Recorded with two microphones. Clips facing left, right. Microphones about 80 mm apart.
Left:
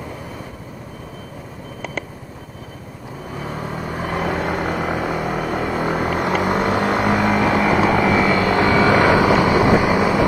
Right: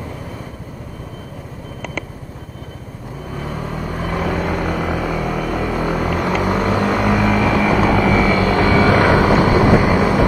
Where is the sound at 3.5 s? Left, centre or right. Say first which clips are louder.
Right 1 dB; left.